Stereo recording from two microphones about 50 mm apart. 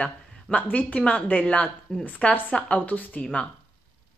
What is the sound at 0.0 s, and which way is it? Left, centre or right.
A woman's voice, left.